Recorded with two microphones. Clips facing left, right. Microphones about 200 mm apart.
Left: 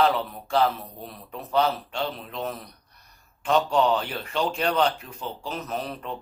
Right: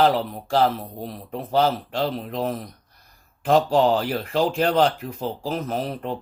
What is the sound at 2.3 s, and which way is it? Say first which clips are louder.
Speech: right 5 dB; 40° right (ahead or behind).